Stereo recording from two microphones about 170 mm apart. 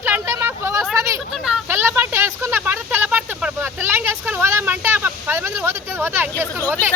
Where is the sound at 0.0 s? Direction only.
15° right (ahead or behind).